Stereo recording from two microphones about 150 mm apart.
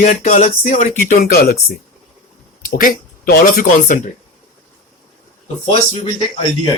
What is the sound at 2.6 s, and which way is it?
Speech, 70° left (ahead or behind).